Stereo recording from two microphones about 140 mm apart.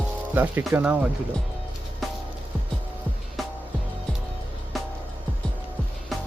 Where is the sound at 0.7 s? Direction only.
10° right (ahead or behind).